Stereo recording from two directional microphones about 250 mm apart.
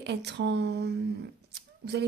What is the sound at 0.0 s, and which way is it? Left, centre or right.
A woman's voice, right.